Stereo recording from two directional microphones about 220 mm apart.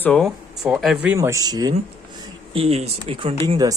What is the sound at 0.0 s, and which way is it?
Speech, 5° left (ahead or behind).